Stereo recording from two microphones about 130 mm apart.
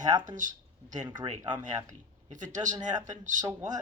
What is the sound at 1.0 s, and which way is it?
Speech, 35° right (ahead or behind).